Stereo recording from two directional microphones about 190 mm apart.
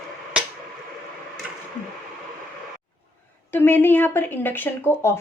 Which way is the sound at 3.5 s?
10° left (ahead or behind).